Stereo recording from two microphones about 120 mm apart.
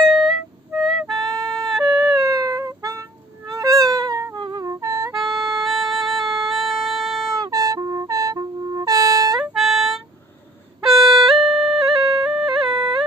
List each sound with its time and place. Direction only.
0.0 s music: centre (ahead or behind)
1.1 s music: 30° right (ahead or behind)
1.5 s a sound: centre (ahead or behind)
2.1 s music: 30° right (ahead or behind)
5.6 s music: centre (ahead or behind)
7.3 s music: 30° right (ahead or behind)
9.5 s music: 5° right (ahead or behind)